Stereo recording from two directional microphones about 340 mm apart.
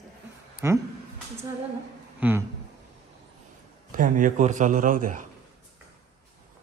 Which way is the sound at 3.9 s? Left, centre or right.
Right.